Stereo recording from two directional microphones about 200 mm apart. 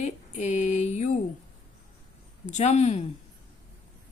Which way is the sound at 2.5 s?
35° left (ahead or behind).